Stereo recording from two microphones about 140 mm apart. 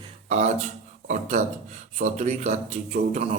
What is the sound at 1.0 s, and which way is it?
Speech, 65° right (ahead or behind).